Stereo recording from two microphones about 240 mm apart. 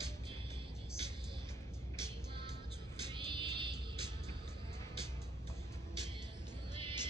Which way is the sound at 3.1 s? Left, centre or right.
Centre.